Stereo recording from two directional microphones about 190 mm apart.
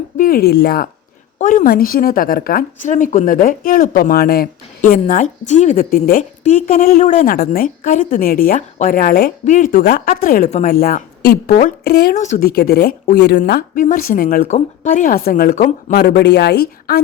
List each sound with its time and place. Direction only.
0.2 s a woman's voice: 50° left (ahead or behind)
1.4 s a woman's voice: 40° left (ahead or behind)
15.9 s speech: 55° left (ahead or behind)